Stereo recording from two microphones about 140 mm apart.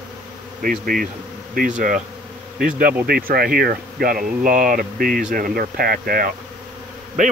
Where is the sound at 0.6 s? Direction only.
90° right.